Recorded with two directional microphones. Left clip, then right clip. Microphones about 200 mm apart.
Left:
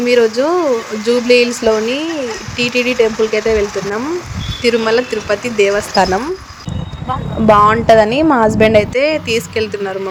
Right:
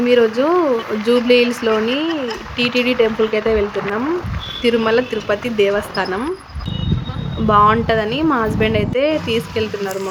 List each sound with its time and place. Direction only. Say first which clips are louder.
0.0 s speech: left 2 dB; 25° left (ahead or behind)
4.6 s speech: left 2 dB; 30° left (ahead or behind)
7.4 s speech: left 4 dB; 30° left (ahead or behind)